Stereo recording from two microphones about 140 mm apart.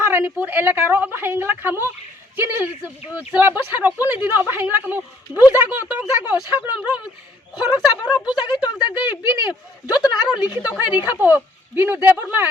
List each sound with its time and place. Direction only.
0.0 s a woman's voice: 15° right (ahead or behind)
8.1 s a woman's voice: 30° left (ahead or behind)
9.0 s a woman's voice: 10° right (ahead or behind)